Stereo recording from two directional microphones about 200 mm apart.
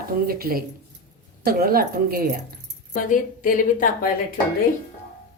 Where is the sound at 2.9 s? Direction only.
40° left (ahead or behind).